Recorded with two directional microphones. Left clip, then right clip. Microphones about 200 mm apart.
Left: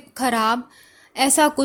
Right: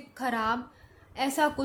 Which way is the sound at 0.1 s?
45° left (ahead or behind).